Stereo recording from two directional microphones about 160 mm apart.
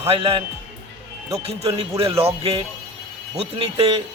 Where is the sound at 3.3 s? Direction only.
35° right (ahead or behind).